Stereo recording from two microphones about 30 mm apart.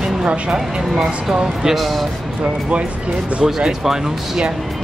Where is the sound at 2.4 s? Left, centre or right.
Right.